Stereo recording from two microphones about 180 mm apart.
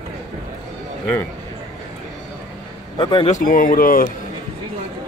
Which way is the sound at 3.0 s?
25° left (ahead or behind).